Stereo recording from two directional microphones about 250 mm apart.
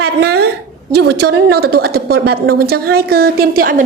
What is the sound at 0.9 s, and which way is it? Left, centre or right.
A woman's voice, right.